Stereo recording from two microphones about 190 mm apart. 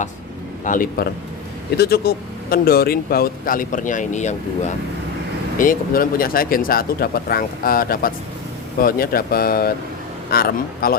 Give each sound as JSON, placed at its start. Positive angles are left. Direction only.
{"t": 0.6, "sound": "speech", "side_deg": 45}
{"t": 5.5, "sound": "speech", "side_deg": 45}